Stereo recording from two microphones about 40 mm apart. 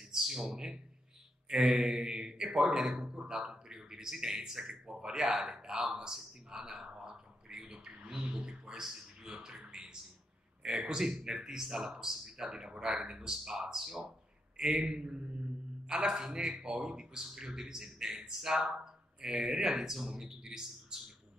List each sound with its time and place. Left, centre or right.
0.0 s a sound: centre
0.6 s a man's voice: centre
8.8 s a man's voice: centre
10.9 s a man's voice: centre